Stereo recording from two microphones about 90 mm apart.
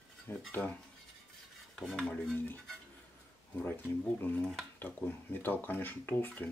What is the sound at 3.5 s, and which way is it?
Speech, 25° left (ahead or behind).